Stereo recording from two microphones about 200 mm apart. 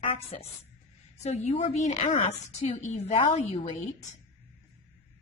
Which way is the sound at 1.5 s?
35° left (ahead or behind).